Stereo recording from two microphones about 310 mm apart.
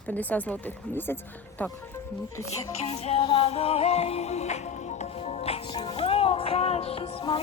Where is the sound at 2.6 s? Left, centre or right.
Centre.